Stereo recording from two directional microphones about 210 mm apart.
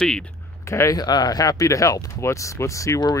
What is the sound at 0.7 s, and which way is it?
Speech, 15° left (ahead or behind).